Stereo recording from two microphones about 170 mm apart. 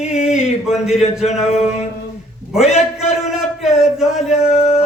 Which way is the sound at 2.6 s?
40° left (ahead or behind).